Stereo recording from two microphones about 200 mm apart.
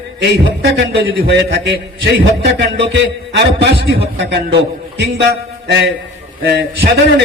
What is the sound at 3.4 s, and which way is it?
A man's voice, 55° right (ahead or behind).